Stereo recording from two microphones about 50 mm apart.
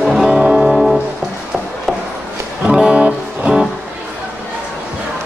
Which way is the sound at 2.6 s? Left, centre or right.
Right.